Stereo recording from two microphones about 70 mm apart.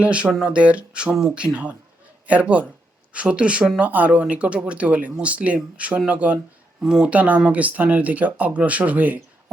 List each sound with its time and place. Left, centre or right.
0.0 s speech: centre